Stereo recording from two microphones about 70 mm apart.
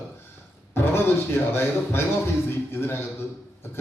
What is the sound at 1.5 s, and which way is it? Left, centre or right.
A man's voice, left.